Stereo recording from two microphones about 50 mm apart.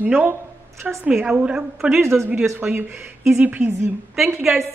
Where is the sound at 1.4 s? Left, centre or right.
Centre.